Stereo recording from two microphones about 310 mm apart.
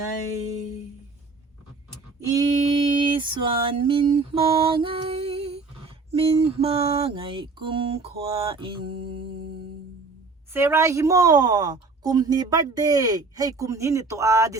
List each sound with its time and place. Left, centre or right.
2.2 s female singing: centre
10.5 s a woman's voice: centre